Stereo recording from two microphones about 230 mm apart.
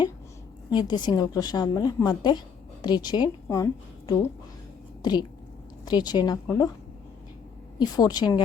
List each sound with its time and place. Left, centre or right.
0.7 s a woman's voice: centre
5.8 s a woman's voice: centre
7.8 s a woman's voice: centre